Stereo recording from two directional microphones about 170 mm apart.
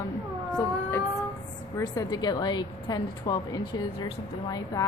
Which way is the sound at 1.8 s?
20° left (ahead or behind).